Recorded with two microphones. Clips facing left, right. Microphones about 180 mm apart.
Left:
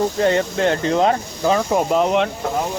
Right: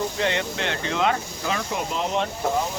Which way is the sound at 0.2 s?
40° left (ahead or behind).